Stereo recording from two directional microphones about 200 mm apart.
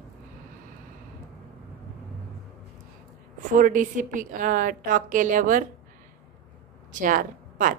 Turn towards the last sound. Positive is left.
turn(degrees=-40)  # may be behind; listen again after turning